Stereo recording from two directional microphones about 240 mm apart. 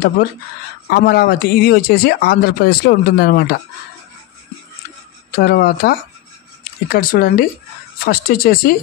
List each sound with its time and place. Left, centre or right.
0.8 s speech: left
5.3 s speech: left